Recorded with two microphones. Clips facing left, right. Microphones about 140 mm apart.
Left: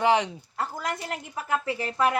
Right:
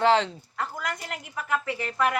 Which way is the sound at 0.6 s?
30° left (ahead or behind).